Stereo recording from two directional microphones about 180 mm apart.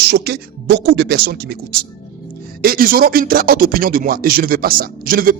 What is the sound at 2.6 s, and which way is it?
Speech, 55° right (ahead or behind).